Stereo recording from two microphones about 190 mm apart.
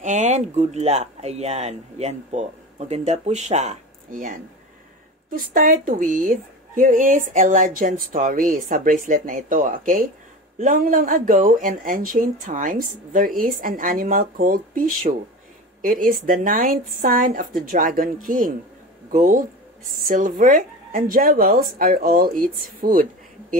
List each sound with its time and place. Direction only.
0.0 s a woman's voice: 40° right (ahead or behind)
16.3 s a woman's voice: 45° right (ahead or behind)